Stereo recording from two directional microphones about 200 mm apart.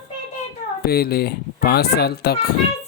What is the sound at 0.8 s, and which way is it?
Speech, 50° left (ahead or behind).